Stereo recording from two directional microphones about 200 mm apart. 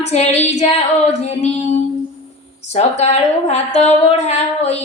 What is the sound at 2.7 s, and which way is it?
A woman's voice, 35° left (ahead or behind).